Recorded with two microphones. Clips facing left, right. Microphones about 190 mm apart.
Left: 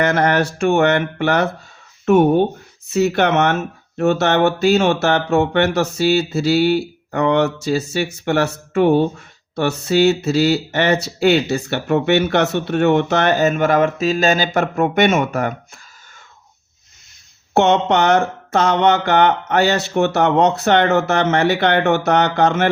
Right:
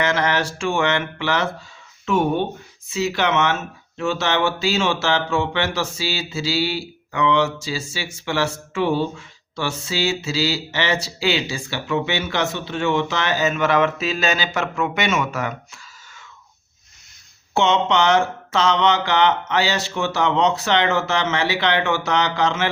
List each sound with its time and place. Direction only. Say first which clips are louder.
0.0 s speech: left 5 dB; 55° left (ahead or behind)
17.5 s speech: left 4 dB; 60° left (ahead or behind)